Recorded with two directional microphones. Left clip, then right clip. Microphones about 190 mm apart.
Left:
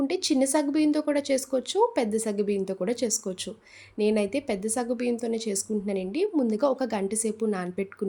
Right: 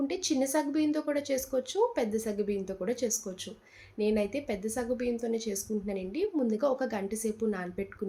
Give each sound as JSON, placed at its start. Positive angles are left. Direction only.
{"t": 0.1, "sound": "speech", "side_deg": 50}